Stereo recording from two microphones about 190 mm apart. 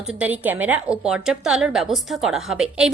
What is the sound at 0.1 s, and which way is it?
A woman's voice, 10° right (ahead or behind).